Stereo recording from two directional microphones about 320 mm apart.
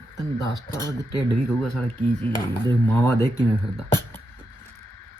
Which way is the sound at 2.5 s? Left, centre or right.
Centre.